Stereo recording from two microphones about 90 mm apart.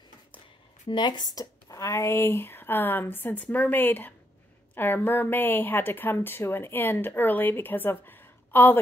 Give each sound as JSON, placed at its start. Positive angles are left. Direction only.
{"t": 0.8, "sound": "speech", "side_deg": 60}